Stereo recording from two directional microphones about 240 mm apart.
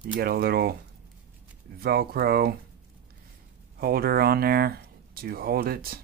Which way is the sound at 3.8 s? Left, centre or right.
Right.